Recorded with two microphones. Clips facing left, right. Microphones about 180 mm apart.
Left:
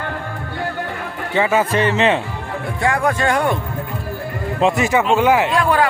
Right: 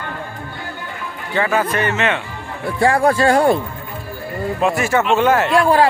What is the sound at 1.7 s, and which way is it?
Speech, 30° left (ahead or behind).